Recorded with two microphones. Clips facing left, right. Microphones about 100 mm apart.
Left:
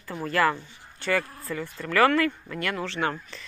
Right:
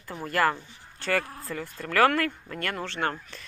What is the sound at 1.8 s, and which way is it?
Speech, 45° right (ahead or behind).